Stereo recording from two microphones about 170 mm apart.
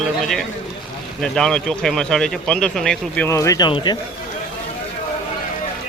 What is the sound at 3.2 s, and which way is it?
Speech, 20° left (ahead or behind).